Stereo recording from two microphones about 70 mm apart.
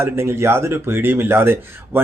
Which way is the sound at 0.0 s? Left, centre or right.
Right.